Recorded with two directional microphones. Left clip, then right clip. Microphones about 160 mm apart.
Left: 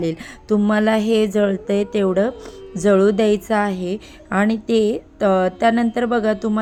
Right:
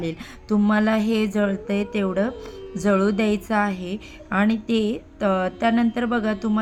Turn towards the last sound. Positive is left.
turn(degrees=25)  # may be behind; listen again after turning